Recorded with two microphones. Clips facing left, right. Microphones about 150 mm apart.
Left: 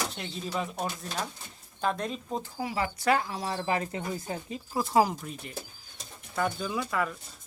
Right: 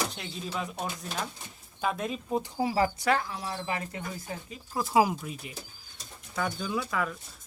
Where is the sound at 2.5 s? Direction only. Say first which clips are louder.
Right 5 dB; 35° right (ahead or behind).